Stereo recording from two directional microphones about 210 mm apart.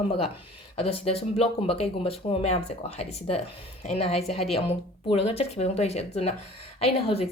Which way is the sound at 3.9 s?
30° left (ahead or behind).